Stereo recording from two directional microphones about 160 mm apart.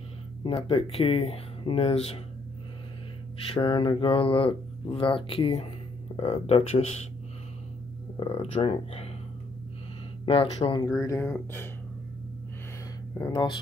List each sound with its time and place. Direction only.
0.4 s speech: 35° left (ahead or behind)
3.4 s speech: 35° left (ahead or behind)
8.2 s speech: 40° left (ahead or behind)
10.2 s speech: 35° left (ahead or behind); by 11.7 s 15° left (ahead or behind)
13.2 s speech: 30° left (ahead or behind)